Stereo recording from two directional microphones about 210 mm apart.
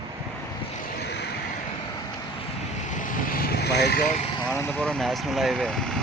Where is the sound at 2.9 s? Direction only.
40° left (ahead or behind).